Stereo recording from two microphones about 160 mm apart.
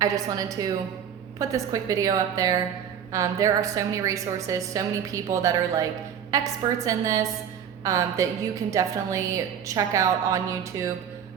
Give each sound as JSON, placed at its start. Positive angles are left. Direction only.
{"t": 0.0, "sound": "a woman's voice", "side_deg": -20}